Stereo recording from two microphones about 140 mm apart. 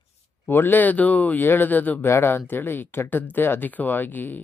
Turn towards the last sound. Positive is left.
turn(degrees=15)  # may be behind; listen again after turning